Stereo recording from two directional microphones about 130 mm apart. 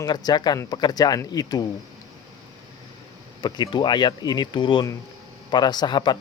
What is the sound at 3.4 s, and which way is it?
Speech, 35° left (ahead or behind).